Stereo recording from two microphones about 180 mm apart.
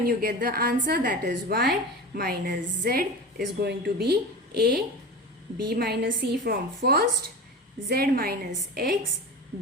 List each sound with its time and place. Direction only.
0.0 s a woman's voice: 55° right (ahead or behind)